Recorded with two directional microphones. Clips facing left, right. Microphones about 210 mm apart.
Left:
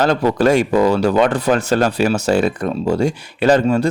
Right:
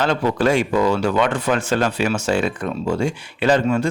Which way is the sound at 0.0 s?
40° left (ahead or behind).